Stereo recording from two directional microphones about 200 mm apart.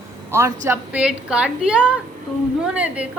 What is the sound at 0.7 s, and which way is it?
Speech, 5° right (ahead or behind).